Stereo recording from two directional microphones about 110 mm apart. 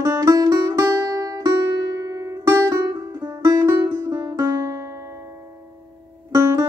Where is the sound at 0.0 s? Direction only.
30° right (ahead or behind).